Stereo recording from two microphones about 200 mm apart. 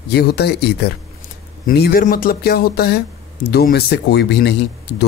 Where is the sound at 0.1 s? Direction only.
55° left (ahead or behind).